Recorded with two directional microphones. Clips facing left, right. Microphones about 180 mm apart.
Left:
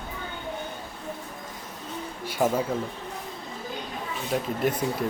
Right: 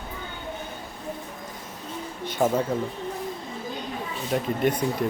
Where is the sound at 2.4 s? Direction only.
10° right (ahead or behind).